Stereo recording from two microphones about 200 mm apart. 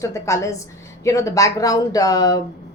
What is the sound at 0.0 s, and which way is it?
A woman's voice, 15° left (ahead or behind).